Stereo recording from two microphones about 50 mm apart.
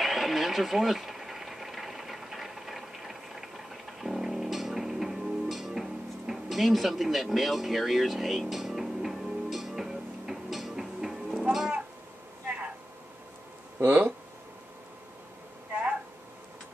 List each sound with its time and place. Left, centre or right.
0.0 s sewing machine: centre
12.4 s vehicle: right
15.7 s a sound: right